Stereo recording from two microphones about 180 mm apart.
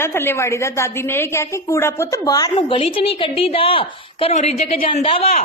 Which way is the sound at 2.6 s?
30° left (ahead or behind).